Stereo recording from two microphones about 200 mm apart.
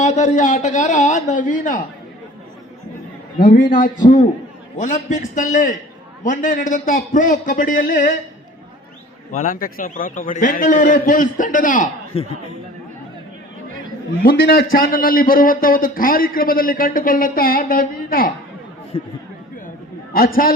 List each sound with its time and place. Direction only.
0.0 s a man's voice: 35° left (ahead or behind)
3.3 s a man's voice: 45° left (ahead or behind)
9.3 s a man's voice: 45° left (ahead or behind)
14.2 s a man's voice: 50° left (ahead or behind)
18.9 s speech: 30° left (ahead or behind)
20.1 s a man's voice: 45° left (ahead or behind)